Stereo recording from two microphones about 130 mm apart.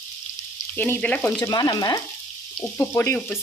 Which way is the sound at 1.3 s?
30° left (ahead or behind).